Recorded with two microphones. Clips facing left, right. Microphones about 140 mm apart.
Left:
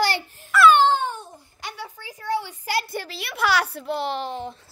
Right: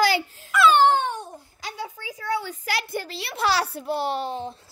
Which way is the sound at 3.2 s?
30° right (ahead or behind).